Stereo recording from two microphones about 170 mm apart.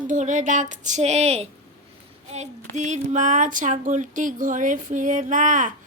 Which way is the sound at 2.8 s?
45° right (ahead or behind).